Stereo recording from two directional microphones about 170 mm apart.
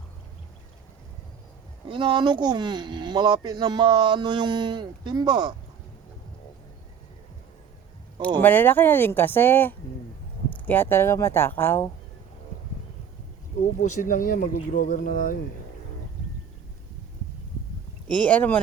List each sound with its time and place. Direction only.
1.9 s speech: 30° right (ahead or behind)
8.4 s speech: 10° left (ahead or behind)
13.6 s speech: 45° left (ahead or behind)
18.1 s speech: 10° left (ahead or behind)